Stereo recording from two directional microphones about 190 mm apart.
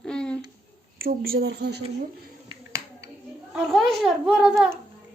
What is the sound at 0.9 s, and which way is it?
Speech, 50° right (ahead or behind).